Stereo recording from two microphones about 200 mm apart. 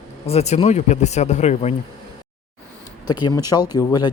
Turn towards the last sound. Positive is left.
turn(degrees=20)  # may be behind; listen again after turning